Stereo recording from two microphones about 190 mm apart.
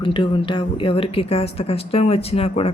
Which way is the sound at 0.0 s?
25° left (ahead or behind).